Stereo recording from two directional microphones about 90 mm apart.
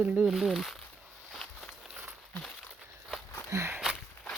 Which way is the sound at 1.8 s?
10° right (ahead or behind).